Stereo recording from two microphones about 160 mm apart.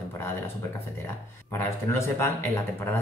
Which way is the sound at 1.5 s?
15° left (ahead or behind).